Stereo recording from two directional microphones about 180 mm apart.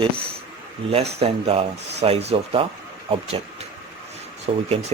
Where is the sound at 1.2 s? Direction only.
35° right (ahead or behind).